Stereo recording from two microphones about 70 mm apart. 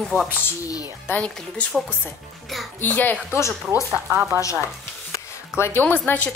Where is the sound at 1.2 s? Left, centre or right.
Centre.